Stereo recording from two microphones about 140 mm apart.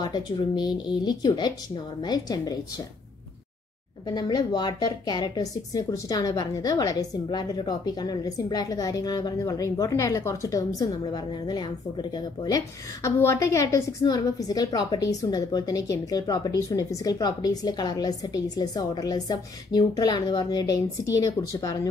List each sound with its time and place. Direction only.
0.0 s a woman's voice: 30° left (ahead or behind)
4.1 s a woman's voice: 30° left (ahead or behind)